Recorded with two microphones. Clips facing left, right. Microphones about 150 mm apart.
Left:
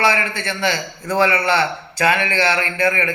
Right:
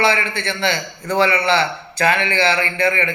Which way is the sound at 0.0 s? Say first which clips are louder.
Right 1 dB; 10° left (ahead or behind).